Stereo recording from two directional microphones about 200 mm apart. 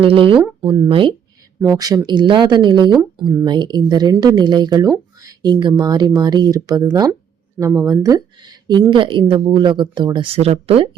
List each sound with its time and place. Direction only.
0.0 s speech: 25° right (ahead or behind)